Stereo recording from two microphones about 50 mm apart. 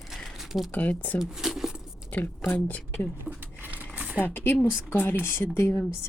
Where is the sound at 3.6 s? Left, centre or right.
Right.